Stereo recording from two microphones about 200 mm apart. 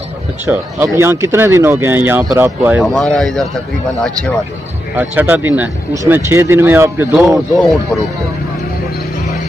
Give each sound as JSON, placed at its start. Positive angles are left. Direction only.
{"t": 0.5, "sound": "speech", "side_deg": -10}
{"t": 4.9, "sound": "speech", "side_deg": -10}